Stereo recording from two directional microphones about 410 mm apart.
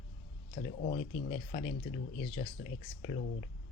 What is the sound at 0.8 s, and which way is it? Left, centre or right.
Speech, centre.